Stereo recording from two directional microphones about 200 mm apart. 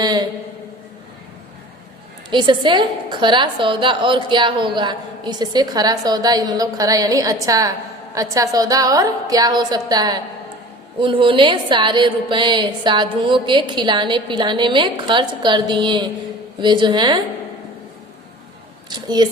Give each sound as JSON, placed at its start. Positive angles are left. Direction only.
{"t": 0.0, "sound": "a woman's voice", "side_deg": -20}
{"t": 2.3, "sound": "a woman's voice", "side_deg": -25}
{"t": 18.9, "sound": "a woman's voice", "side_deg": -20}